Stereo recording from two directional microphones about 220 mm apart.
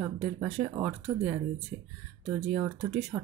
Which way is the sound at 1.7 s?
25° right (ahead or behind).